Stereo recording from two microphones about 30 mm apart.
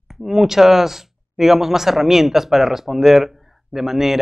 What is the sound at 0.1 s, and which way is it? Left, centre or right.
Speech, centre.